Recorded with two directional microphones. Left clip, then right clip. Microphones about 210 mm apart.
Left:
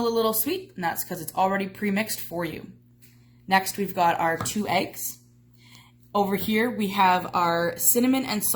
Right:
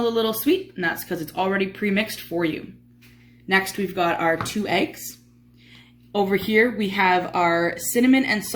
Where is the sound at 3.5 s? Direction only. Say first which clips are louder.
Right 2 dB; 60° left (ahead or behind).